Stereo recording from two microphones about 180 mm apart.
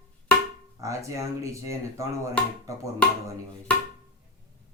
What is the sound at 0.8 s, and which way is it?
Speech, 15° right (ahead or behind).